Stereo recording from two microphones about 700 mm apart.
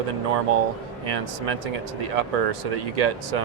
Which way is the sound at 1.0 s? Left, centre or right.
Right.